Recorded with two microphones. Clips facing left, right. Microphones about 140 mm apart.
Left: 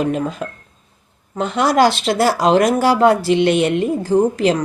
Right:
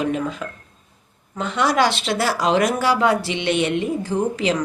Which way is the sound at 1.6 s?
45° left (ahead or behind).